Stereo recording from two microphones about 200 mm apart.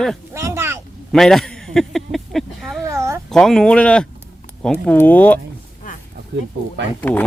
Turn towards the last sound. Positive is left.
turn(degrees=10)  # may be behind; listen again after turning